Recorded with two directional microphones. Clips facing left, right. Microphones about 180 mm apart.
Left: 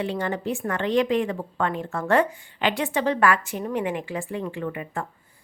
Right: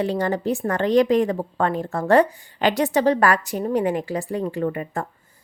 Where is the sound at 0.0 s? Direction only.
40° right (ahead or behind).